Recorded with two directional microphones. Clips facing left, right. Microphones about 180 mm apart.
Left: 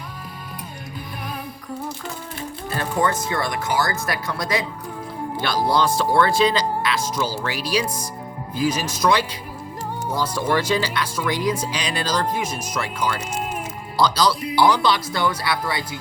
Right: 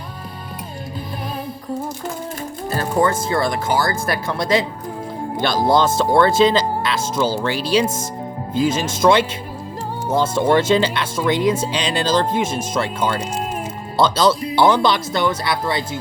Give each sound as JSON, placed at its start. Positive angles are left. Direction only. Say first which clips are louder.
{"t": 2.6, "sound": "music", "louder": "right 4 dB", "side_deg": -40}
{"t": 3.1, "sound": "speech", "louder": "right 5 dB", "side_deg": -30}